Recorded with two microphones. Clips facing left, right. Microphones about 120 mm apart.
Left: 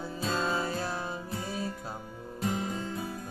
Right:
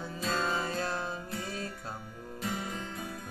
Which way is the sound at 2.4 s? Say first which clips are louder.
Left 5 dB; 35° left (ahead or behind).